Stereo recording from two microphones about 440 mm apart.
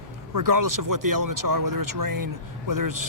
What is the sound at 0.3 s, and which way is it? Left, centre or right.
Speech, right.